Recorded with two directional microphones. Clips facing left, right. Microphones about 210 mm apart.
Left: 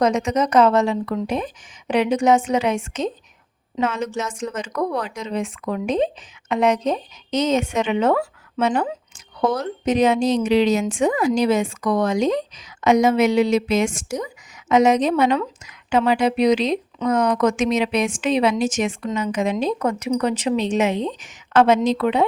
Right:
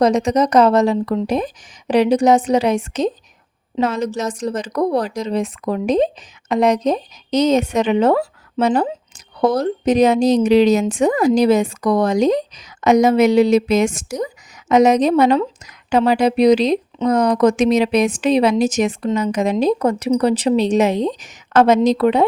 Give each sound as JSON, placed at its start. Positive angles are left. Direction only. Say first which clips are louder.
{"t": 0.0, "sound": "a woman's voice", "louder": "right 4 dB", "side_deg": -35}